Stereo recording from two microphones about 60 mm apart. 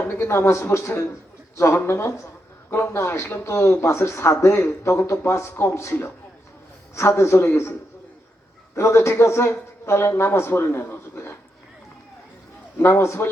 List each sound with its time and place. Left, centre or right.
0.0 s a man's voice: left
8.7 s speech: left
12.7 s a man's voice: left